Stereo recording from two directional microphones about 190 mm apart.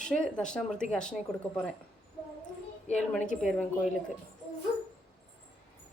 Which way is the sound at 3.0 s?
5° left (ahead or behind).